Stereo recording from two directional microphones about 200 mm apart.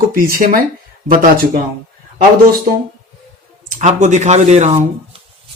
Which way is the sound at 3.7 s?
40° right (ahead or behind).